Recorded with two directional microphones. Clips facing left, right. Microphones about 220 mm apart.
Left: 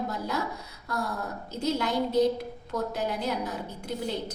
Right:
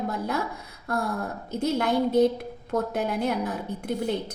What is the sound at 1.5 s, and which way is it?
A woman's voice, 55° right (ahead or behind).